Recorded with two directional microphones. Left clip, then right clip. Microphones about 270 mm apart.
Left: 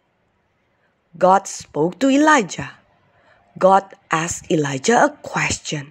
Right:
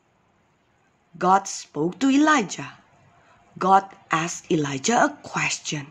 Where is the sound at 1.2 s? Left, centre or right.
Centre.